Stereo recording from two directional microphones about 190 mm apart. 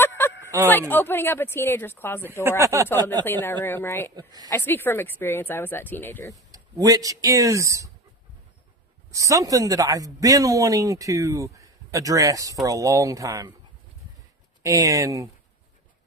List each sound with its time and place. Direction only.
0.7 s speech: 10° left (ahead or behind)
2.4 s speech: 15° right (ahead or behind)
3.2 s speech: 10° left (ahead or behind)
4.1 s a woman's voice: 20° right (ahead or behind)
4.4 s speech: 10° left (ahead or behind)
6.3 s speech: 20° right (ahead or behind)
9.1 s speech: 15° right (ahead or behind)
14.6 s speech: 15° right (ahead or behind)